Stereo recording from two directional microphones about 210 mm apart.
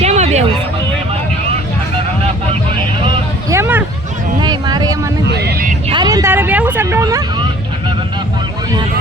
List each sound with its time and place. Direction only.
0.0 s music: 30° right (ahead or behind)
2.2 s vehicle: 30° right (ahead or behind)
3.5 s a sound: 10° right (ahead or behind)
5.3 s vehicle: 50° right (ahead or behind)
5.9 s vehicle: 20° right (ahead or behind)